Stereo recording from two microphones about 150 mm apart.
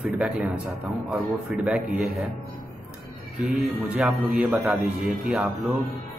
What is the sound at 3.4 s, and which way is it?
A man's voice, 5° right (ahead or behind).